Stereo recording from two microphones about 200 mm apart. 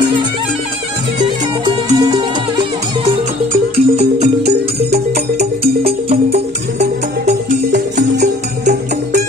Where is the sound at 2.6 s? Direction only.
25° right (ahead or behind).